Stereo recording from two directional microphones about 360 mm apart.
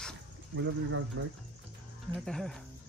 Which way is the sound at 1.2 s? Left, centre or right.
Right.